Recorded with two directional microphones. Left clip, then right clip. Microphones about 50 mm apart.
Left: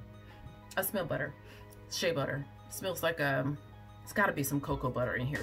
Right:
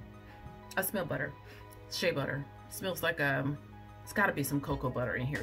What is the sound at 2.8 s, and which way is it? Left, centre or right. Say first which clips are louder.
Speech: even; right.